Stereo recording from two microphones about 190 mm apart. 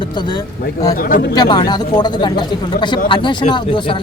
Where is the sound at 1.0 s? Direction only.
50° left (ahead or behind).